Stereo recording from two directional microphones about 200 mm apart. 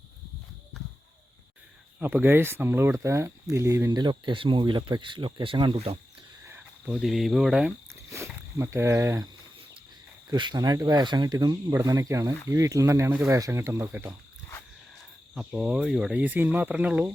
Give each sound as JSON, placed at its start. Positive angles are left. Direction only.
{"t": 2.0, "sound": "speech", "side_deg": -10}
{"t": 6.5, "sound": "cricket", "side_deg": -10}
{"t": 7.0, "sound": "speech", "side_deg": 0}
{"t": 8.1, "sound": "speech", "side_deg": -15}
{"t": 10.3, "sound": "speech", "side_deg": -20}
{"t": 15.4, "sound": "speech", "side_deg": -5}